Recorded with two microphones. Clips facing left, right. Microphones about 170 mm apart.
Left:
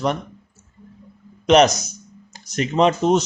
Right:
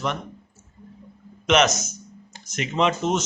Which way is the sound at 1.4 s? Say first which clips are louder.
Left 6 dB; 35° left (ahead or behind).